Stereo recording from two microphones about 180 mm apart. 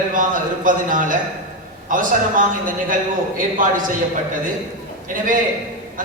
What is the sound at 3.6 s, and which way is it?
Speech, 50° right (ahead or behind).